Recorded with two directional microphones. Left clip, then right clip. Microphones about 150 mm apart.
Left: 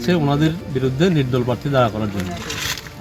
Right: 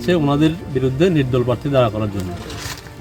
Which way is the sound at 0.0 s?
35° right (ahead or behind).